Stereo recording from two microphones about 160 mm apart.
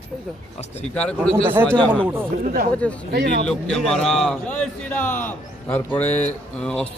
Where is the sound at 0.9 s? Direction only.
10° left (ahead or behind).